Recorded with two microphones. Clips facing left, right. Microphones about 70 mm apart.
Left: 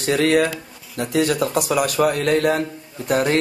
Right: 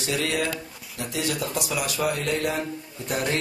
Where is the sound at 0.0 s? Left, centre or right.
Left.